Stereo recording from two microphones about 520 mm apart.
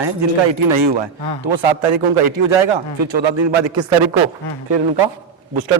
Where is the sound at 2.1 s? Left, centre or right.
Right.